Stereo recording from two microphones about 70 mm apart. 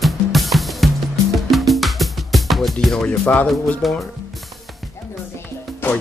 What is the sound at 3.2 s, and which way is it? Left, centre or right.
Speech, left.